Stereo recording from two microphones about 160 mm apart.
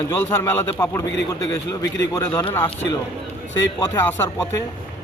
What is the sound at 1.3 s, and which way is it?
Speech, 25° left (ahead or behind).